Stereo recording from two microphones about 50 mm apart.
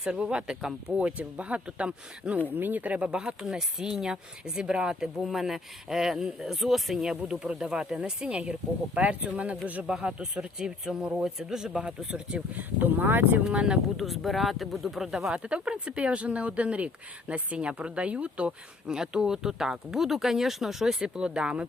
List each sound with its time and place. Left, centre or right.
0.1 s speech: centre
2.5 s speech: right; by 5.0 s centre
5.2 s speech: centre
12.5 s speech: right
13.4 s speech: centre
13.9 s speech: centre
15.3 s speech: right; by 20.9 s centre
21.0 s speech: centre